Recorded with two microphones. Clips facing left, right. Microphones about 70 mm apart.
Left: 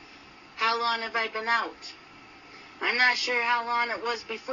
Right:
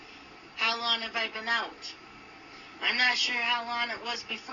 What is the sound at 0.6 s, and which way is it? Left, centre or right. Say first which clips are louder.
Speech: left 5 dB; left.